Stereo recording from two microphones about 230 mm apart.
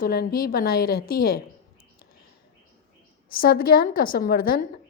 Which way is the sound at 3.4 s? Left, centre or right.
Left.